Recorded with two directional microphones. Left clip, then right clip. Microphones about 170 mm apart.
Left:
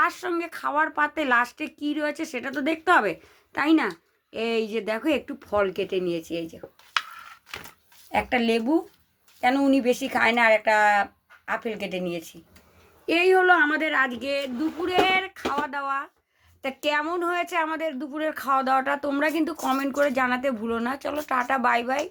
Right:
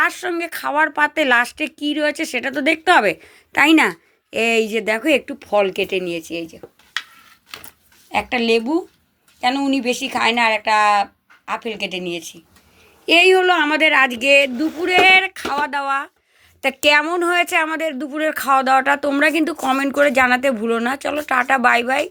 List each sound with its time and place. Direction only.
0.0 s speech: 15° right (ahead or behind)
8.1 s speech: 5° right (ahead or behind)
13.1 s speech: 30° right (ahead or behind)